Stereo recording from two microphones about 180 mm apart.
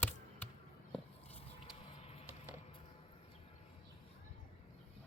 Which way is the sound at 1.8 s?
35° left (ahead or behind).